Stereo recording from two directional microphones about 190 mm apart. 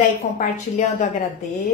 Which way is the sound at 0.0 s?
40° left (ahead or behind).